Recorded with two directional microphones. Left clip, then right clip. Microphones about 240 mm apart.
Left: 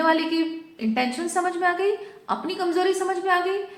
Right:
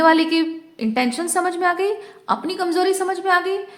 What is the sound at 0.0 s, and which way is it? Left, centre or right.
A woman's voice, right.